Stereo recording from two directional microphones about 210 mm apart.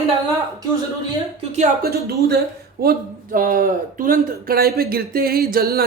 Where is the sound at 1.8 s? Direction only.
50° right (ahead or behind).